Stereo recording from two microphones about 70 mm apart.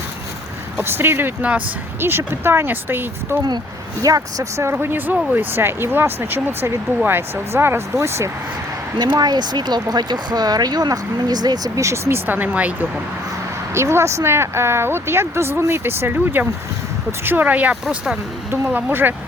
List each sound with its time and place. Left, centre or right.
0.8 s speech: right
4.0 s speech: right
4.7 s speech: right
9.0 s speech: right
11.8 s speech: right
12.2 s speech: right
13.7 s speech: right
17.8 s speech: centre
18.5 s speech: right